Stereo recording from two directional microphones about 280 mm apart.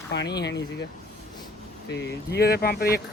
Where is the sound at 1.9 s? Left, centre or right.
Left.